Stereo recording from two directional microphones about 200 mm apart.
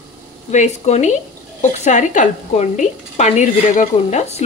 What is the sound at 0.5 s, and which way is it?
A woman's voice, 35° left (ahead or behind).